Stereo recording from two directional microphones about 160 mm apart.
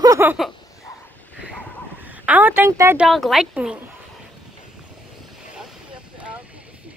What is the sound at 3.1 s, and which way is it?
Speech, centre (ahead or behind).